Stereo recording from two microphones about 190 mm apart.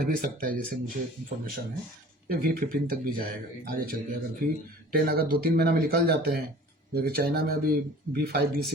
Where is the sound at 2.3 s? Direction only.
50° right (ahead or behind).